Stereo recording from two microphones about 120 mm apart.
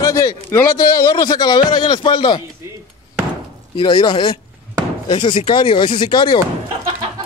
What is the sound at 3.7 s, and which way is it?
A man's voice, 40° left (ahead or behind).